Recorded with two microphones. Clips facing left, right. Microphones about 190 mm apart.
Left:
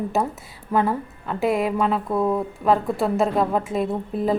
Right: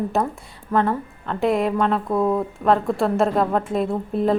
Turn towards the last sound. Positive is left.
turn(degrees=0)  # may be behind; listen again after turning